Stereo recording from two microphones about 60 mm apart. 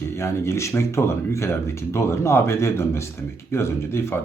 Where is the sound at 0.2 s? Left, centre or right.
Left.